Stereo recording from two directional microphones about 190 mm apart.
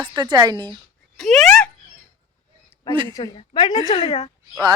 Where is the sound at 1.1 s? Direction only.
Centre (ahead or behind).